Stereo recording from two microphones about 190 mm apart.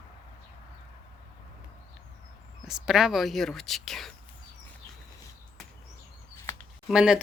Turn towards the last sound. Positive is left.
turn(degrees=-5)  # may be behind; listen again after turning